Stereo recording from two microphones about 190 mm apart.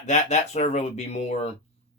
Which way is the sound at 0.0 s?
35° left (ahead or behind).